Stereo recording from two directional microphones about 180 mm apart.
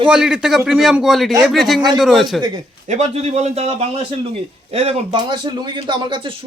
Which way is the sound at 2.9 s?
40° right (ahead or behind).